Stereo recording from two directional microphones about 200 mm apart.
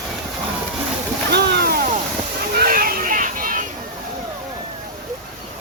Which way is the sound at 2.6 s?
45° right (ahead or behind).